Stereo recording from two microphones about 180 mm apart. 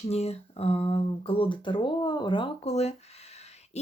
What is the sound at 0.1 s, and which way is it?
Speech, 35° left (ahead or behind).